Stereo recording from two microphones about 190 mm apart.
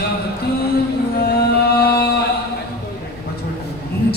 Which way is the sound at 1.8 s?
55° left (ahead or behind).